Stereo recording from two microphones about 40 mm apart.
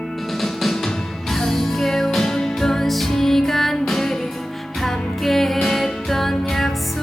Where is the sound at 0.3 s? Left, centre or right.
Centre.